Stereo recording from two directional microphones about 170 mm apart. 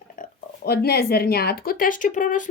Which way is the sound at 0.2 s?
65° left (ahead or behind).